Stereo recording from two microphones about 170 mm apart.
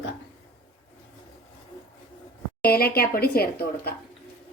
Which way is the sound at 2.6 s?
65° left (ahead or behind).